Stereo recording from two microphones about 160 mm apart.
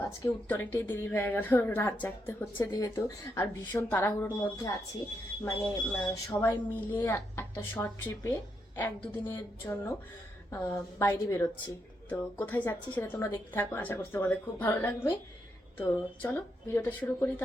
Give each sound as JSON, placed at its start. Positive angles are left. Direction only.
{"t": 0.0, "sound": "a woman's voice", "side_deg": 10}
{"t": 5.5, "sound": "a woman's voice", "side_deg": 20}